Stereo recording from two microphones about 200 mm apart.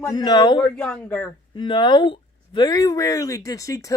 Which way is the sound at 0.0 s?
20° left (ahead or behind).